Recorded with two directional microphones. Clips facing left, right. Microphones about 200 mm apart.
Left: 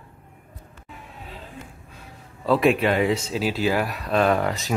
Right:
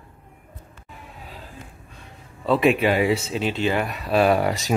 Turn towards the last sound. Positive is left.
turn(degrees=-10)  # may be behind; listen again after turning